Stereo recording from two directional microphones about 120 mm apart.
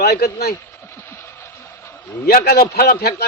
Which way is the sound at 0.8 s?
20° left (ahead or behind).